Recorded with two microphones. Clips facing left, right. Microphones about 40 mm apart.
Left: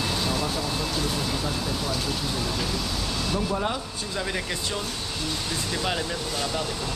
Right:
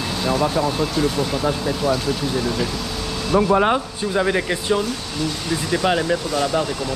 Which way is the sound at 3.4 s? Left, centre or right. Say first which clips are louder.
Right 14 dB; right.